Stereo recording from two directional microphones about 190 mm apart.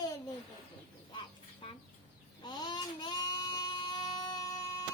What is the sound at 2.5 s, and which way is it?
Child singing, 20° left (ahead or behind).